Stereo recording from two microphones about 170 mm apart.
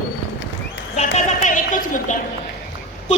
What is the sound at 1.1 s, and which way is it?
A woman's voice, 45° left (ahead or behind).